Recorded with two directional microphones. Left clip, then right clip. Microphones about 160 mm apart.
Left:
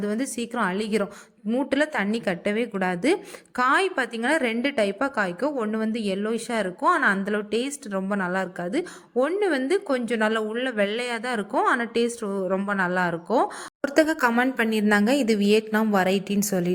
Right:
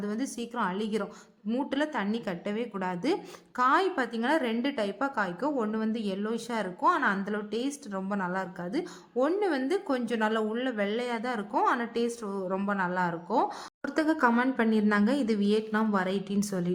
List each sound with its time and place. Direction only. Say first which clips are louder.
0.0 s a woman's voice: left 6 dB; 30° left (ahead or behind)
1.5 s a woman's voice: left 7 dB; 20° left (ahead or behind)
1.8 s a woman's voice: left 6 dB; 30° left (ahead or behind)